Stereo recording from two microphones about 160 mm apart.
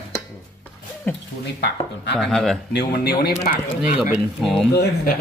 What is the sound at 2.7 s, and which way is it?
Speech, 90° left.